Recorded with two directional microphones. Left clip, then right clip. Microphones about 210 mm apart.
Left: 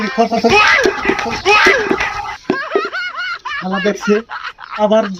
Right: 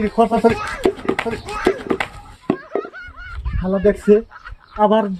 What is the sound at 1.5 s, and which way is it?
Speech, 55° left (ahead or behind).